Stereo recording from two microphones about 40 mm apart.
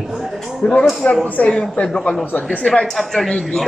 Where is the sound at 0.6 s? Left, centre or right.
Left.